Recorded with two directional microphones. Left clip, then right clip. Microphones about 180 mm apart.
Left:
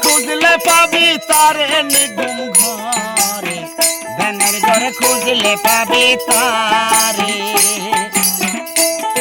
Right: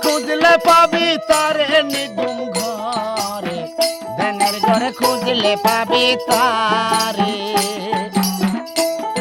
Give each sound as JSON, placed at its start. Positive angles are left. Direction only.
{"t": 0.4, "sound": "music", "side_deg": -5}
{"t": 4.2, "sound": "music", "side_deg": -15}
{"t": 7.9, "sound": "music", "side_deg": 30}